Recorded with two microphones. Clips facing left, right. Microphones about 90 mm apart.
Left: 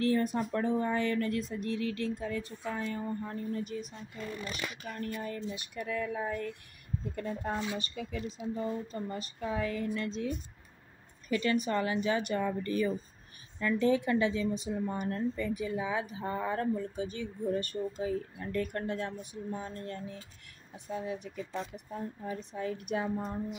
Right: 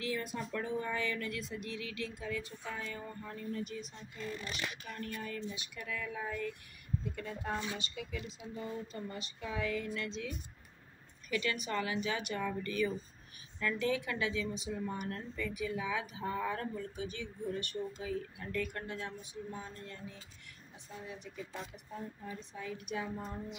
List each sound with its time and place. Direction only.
0.0 s speech: 45° left (ahead or behind)
5.0 s a woman's voice: 35° left (ahead or behind)
22.3 s a woman's voice: 50° left (ahead or behind)